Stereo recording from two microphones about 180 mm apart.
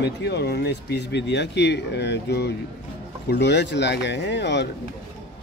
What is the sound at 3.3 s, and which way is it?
Speech, 70° left (ahead or behind).